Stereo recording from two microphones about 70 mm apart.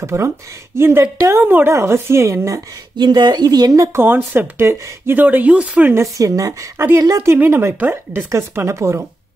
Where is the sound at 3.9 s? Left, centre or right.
Right.